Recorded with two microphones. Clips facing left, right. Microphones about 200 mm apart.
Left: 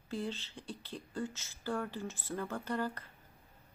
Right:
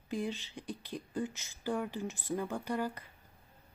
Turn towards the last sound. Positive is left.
turn(degrees=-15)  # may be behind; listen again after turning